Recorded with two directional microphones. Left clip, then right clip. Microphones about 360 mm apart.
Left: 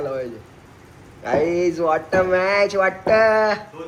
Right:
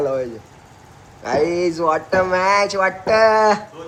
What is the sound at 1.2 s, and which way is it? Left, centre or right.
Speech, centre.